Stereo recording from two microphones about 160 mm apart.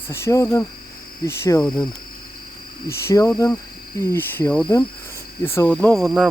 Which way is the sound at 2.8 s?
15° left (ahead or behind).